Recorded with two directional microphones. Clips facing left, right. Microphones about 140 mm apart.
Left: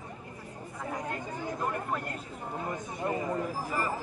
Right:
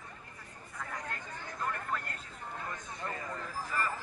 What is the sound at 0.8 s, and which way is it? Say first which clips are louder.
Speech: left 6 dB; 20° left (ahead or behind).